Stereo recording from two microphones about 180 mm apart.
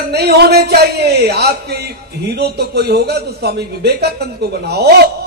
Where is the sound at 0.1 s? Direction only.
65° right (ahead or behind).